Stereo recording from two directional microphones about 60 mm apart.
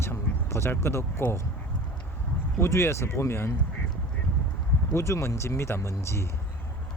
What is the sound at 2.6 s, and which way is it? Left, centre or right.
Speech, left.